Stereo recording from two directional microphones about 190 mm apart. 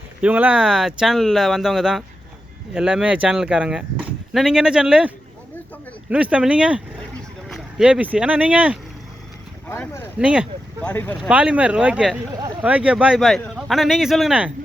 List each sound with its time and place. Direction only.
0.2 s speech: 10° right (ahead or behind)
9.6 s speech: 15° left (ahead or behind)
10.2 s speech: 5° right (ahead or behind)
10.8 s speech: 10° left (ahead or behind)
11.2 s speech: 5° right (ahead or behind)
12.3 s speech: 20° right (ahead or behind)
12.6 s speech: 5° right (ahead or behind)